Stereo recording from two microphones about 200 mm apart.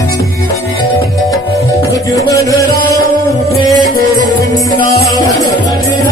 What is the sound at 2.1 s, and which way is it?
Music, 15° left (ahead or behind).